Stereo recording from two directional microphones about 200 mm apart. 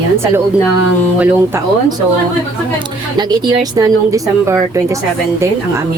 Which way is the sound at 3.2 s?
20° right (ahead or behind).